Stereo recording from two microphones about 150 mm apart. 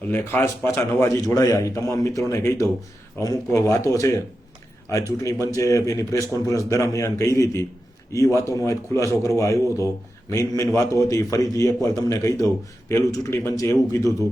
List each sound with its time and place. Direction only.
0.1 s speech: 15° left (ahead or behind)